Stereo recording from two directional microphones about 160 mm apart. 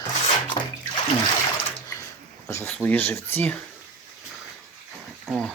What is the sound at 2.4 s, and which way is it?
Speech, 15° left (ahead or behind).